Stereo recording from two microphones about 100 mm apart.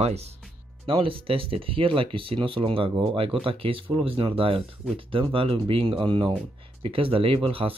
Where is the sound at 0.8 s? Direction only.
60° right (ahead or behind).